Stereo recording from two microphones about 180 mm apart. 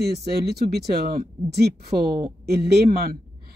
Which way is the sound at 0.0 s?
65° right (ahead or behind).